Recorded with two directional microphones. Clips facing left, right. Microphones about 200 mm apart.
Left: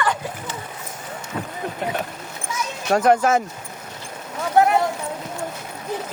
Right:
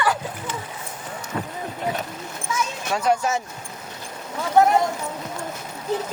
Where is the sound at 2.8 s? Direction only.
55° left (ahead or behind).